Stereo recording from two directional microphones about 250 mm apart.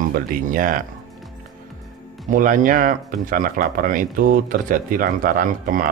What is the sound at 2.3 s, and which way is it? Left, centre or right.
Speech, right.